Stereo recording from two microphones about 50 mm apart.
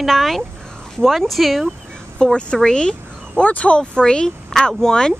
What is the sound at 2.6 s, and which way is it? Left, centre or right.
Dog, centre.